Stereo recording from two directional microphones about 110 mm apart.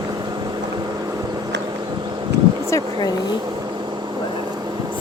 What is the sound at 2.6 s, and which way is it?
Vehicle, 30° left (ahead or behind).